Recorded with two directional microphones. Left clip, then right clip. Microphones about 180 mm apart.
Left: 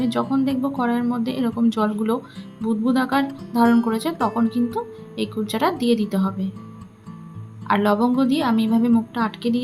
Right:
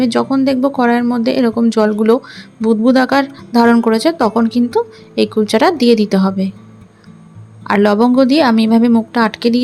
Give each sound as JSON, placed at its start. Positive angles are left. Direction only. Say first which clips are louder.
{"t": 0.0, "sound": "speech", "louder": "right 8 dB", "side_deg": -30}
{"t": 7.7, "sound": "speech", "louder": "right 7 dB", "side_deg": -30}